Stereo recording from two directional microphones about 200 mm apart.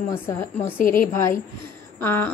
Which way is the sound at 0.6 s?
45° left (ahead or behind).